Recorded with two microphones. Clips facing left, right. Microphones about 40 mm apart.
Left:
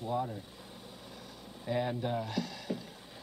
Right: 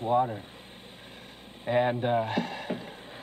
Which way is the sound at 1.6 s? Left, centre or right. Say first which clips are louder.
Right 8 dB; right.